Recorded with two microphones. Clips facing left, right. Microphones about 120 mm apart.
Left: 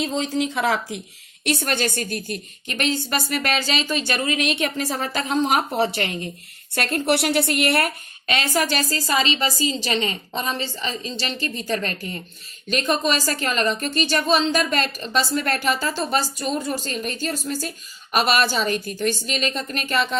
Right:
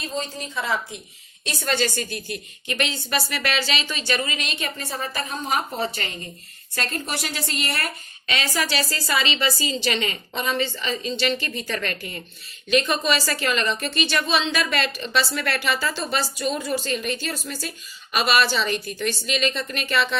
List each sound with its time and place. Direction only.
0.0 s a woman's voice: 90° left
1.5 s a woman's voice: 60° left (ahead or behind); by 20.1 s 45° left (ahead or behind)